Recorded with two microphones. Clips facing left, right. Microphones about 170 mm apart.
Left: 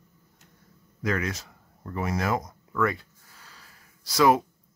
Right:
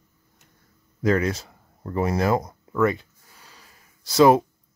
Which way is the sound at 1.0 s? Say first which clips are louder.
Right 7 dB; 30° right (ahead or behind).